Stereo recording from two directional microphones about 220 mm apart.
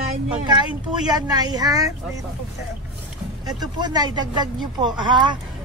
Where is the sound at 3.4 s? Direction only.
20° right (ahead or behind).